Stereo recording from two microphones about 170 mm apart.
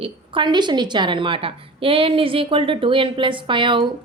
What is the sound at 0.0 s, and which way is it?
A woman's voice, 30° right (ahead or behind).